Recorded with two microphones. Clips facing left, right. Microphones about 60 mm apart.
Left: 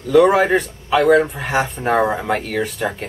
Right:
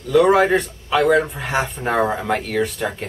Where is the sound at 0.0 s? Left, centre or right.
Centre.